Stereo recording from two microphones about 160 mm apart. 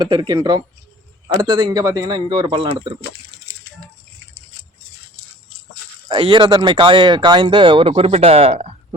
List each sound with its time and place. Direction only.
0.0 s speech: 25° right (ahead or behind)
6.1 s speech: 35° right (ahead or behind)